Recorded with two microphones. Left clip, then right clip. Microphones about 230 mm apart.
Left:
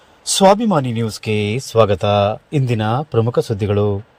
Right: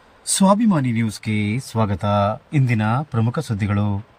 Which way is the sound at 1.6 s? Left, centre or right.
Centre.